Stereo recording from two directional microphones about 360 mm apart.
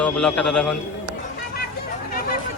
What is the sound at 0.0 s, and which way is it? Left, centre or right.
Speech, centre.